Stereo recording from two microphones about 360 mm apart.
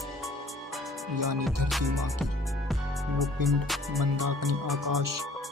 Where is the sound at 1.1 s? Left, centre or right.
Right.